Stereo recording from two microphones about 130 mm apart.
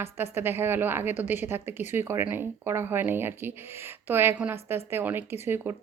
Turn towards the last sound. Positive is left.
turn(degrees=-15)  # may be behind; listen again after turning